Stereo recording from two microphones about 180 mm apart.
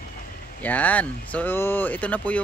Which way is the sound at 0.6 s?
10° left (ahead or behind).